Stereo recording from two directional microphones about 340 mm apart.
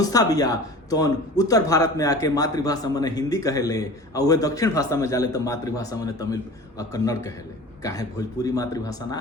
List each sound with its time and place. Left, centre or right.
0.0 s speech: centre